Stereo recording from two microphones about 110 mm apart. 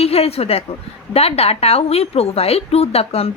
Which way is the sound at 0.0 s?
65° left (ahead or behind).